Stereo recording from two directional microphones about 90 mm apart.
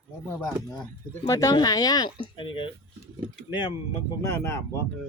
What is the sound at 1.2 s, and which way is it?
Speech, 40° left (ahead or behind).